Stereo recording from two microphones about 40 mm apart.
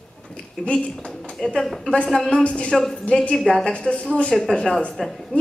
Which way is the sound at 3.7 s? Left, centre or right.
Left.